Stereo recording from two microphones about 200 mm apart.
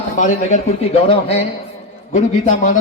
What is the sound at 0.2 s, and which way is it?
Speech, 35° left (ahead or behind).